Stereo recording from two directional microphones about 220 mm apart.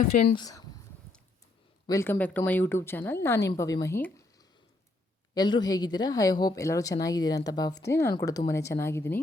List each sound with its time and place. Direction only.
0.3 s a woman's voice: 15° left (ahead or behind)
1.9 s a woman's voice: 10° left (ahead or behind)